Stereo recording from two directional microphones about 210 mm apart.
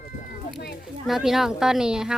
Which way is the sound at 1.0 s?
Centre (ahead or behind).